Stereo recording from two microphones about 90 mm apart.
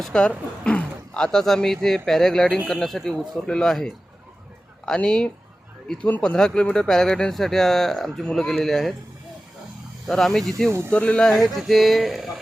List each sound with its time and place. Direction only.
0.0 s speech: 10° left (ahead or behind)
10.1 s speech: 5° left (ahead or behind)
10.7 s speech: 30° right (ahead or behind)
10.9 s speech: 15° left (ahead or behind)